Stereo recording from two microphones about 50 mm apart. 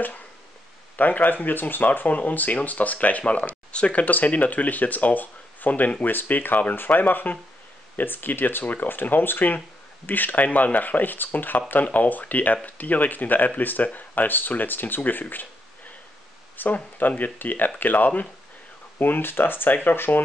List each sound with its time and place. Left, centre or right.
0.9 s speech: left
4.0 s speech: left
16.5 s speech: left